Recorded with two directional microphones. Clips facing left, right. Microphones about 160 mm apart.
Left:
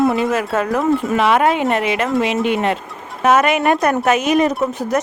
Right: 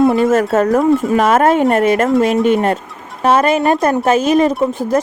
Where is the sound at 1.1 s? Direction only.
45° right (ahead or behind).